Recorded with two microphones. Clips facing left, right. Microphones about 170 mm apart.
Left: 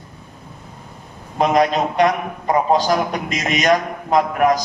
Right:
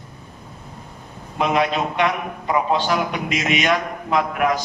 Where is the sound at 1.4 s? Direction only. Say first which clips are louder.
Left 4 dB; 40° left (ahead or behind).